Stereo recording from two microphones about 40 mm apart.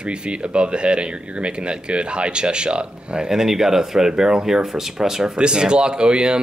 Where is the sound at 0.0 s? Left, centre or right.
Right.